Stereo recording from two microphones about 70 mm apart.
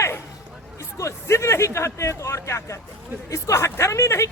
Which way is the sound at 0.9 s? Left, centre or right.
Left.